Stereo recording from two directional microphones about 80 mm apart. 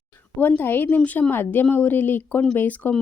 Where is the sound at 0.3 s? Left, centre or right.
Left.